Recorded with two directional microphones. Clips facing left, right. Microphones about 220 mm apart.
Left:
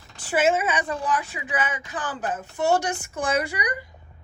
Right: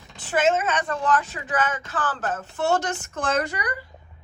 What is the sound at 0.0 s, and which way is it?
A woman's voice, 5° left (ahead or behind).